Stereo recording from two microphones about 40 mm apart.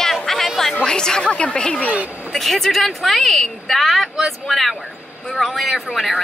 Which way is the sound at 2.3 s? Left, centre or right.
Centre.